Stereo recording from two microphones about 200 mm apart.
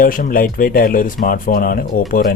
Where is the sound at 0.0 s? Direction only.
45° left (ahead or behind).